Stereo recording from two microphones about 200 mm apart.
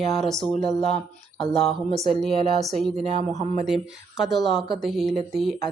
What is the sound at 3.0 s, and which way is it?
Speech, 35° right (ahead or behind).